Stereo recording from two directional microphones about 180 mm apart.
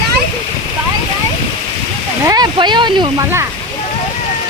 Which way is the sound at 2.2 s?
20° right (ahead or behind).